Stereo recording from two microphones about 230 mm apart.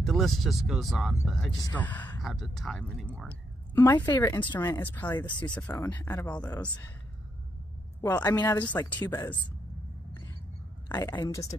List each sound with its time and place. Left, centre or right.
0.0 s speech: centre
3.7 s speech: centre
5.4 s speech: centre
8.0 s speech: centre
10.9 s speech: centre